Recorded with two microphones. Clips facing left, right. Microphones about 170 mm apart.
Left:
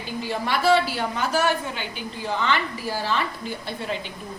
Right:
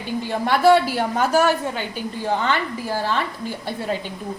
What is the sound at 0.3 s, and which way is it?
A woman's voice, 50° right (ahead or behind).